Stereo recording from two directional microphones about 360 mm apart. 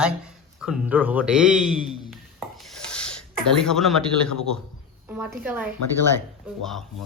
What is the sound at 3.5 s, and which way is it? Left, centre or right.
Speech, centre.